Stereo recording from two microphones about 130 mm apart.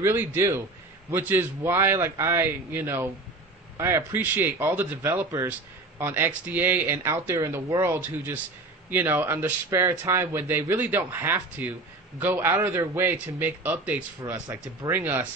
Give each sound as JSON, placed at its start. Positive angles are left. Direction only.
{"t": 0.0, "sound": "a man's voice", "side_deg": -20}